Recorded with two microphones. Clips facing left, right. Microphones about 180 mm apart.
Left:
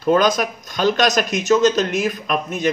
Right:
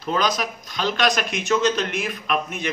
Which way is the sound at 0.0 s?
50° left (ahead or behind).